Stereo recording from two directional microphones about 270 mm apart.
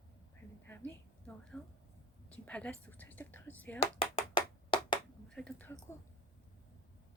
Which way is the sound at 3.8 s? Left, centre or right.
Centre.